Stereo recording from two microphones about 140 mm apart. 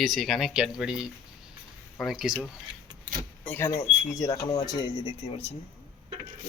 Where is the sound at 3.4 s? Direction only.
15° left (ahead or behind).